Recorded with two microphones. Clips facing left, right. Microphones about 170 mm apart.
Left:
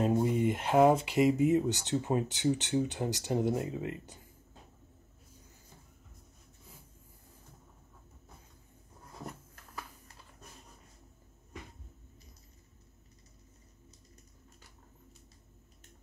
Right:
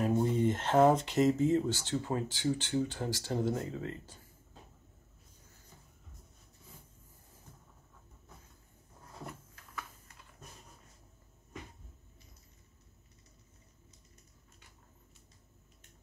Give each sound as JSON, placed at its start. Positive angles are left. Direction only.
{"t": 0.1, "sound": "speech", "side_deg": 10}